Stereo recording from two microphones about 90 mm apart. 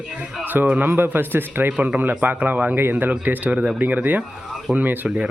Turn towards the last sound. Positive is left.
turn(degrees=-20)  # may be behind; listen again after turning